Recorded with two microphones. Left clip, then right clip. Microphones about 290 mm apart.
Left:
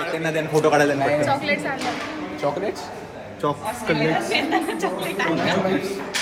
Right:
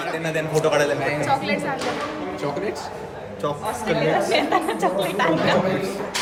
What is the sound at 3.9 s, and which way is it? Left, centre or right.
A woman's voice, centre.